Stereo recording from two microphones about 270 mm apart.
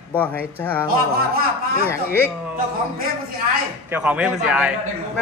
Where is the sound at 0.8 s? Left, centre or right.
Right.